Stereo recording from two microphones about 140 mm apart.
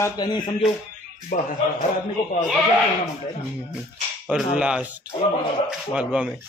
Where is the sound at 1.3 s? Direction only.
80° left.